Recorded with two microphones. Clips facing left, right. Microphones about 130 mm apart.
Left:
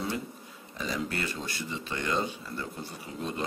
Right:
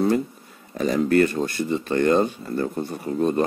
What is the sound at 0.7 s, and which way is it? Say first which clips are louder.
Speech: right 15 dB; 50° right (ahead or behind).